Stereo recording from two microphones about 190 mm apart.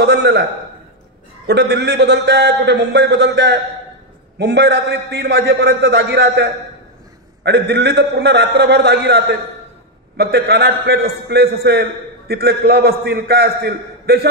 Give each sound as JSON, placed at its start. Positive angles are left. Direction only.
{"t": 0.0, "sound": "a man's voice", "side_deg": -60}
{"t": 1.5, "sound": "a man's voice", "side_deg": -60}